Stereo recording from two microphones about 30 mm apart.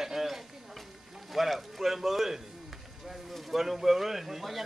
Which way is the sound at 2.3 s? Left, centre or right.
Centre.